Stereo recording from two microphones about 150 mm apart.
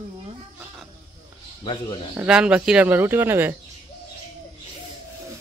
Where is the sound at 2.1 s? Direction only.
5° right (ahead or behind).